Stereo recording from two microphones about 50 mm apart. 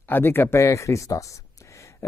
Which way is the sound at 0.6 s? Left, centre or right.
Left.